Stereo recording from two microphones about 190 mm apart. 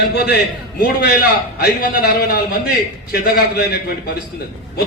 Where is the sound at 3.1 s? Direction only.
55° left (ahead or behind).